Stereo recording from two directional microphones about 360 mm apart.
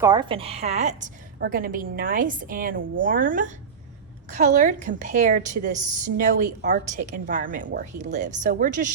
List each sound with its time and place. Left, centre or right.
0.0 s a woman's voice: centre